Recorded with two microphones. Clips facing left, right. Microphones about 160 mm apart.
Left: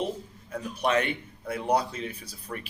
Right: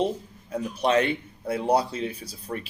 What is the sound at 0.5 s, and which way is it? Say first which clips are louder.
Speech: right 4 dB; 30° right (ahead or behind).